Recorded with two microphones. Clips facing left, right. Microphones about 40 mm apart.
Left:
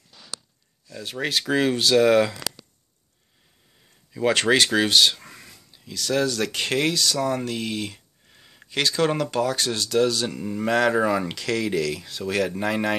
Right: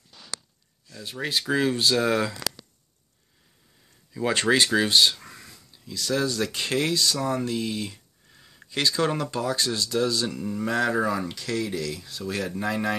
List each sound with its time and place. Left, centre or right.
1.5 s speech: left
4.3 s speech: left
5.1 s a sound: left
5.9 s speech: left
7.2 s speech: left
8.3 s a sound: left
8.6 s speech: left
10.2 s speech: left
10.7 s speech: left
12.4 s speech: left